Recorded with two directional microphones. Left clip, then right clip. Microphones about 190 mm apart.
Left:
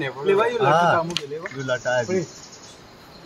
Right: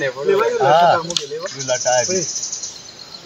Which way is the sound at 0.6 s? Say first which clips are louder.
Right 7 dB; 55° left (ahead or behind).